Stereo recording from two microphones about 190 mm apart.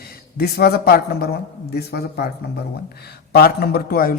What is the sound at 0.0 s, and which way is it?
A man's voice, 55° left (ahead or behind).